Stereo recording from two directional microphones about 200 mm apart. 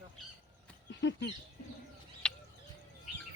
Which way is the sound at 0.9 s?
65° left (ahead or behind).